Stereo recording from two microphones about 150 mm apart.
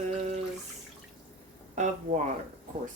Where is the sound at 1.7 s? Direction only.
50° right (ahead or behind).